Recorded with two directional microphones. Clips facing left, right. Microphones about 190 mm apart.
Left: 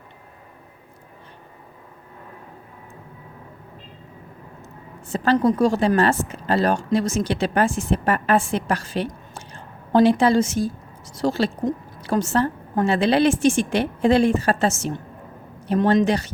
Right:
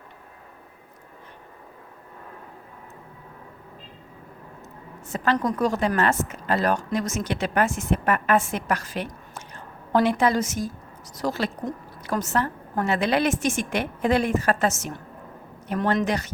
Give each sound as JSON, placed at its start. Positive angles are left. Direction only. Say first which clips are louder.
{"t": 5.1, "sound": "a woman's voice", "louder": "left 6 dB", "side_deg": 30}